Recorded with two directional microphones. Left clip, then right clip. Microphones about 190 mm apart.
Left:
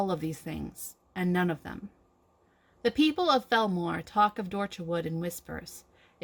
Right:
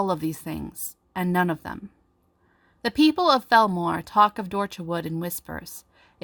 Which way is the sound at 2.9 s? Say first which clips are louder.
Right 7 dB; 50° right (ahead or behind).